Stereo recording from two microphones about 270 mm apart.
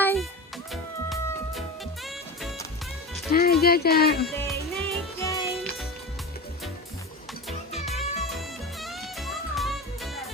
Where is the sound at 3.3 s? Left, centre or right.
Left.